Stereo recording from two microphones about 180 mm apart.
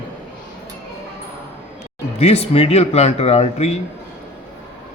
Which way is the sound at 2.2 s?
35° left (ahead or behind).